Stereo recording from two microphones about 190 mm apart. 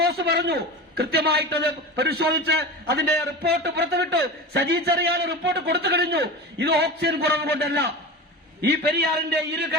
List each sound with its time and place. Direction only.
0.0 s a man's voice: 55° right (ahead or behind)